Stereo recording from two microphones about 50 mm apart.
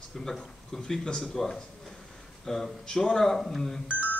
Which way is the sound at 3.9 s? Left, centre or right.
Left.